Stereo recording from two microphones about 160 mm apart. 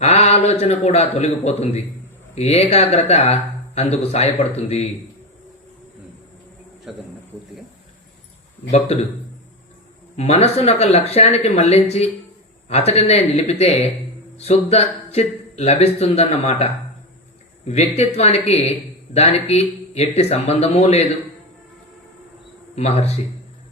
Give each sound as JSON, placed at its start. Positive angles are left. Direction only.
{"t": 0.0, "sound": "a man's voice", "side_deg": 45}
{"t": 6.9, "sound": "a man's voice", "side_deg": -5}
{"t": 10.2, "sound": "speech", "side_deg": 40}
{"t": 22.7, "sound": "speech", "side_deg": 40}